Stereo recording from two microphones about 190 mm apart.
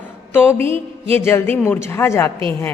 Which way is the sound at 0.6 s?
30° right (ahead or behind).